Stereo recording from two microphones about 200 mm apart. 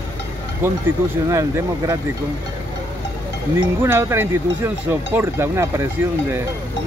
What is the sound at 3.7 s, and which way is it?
Speech, 10° right (ahead or behind).